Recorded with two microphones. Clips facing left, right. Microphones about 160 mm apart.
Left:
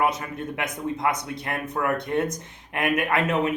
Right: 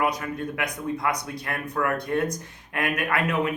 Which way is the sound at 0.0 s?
25° left (ahead or behind).